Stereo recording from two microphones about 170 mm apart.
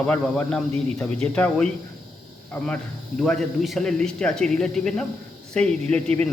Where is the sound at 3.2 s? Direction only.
Centre (ahead or behind).